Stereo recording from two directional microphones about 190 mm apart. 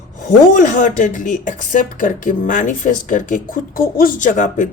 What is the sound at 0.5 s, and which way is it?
Speech, 45° left (ahead or behind).